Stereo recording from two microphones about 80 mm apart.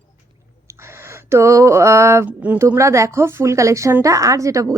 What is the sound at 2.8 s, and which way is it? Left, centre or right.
A woman's voice, right.